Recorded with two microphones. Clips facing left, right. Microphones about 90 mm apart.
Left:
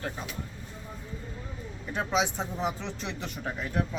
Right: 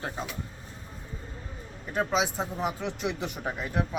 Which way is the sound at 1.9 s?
Centre (ahead or behind).